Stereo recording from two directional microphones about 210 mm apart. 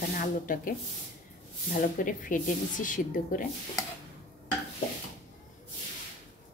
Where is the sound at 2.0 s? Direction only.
40° left (ahead or behind).